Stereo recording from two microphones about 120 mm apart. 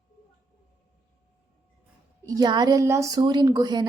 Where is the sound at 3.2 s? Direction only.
35° right (ahead or behind).